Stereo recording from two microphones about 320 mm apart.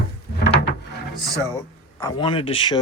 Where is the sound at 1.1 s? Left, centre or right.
Centre.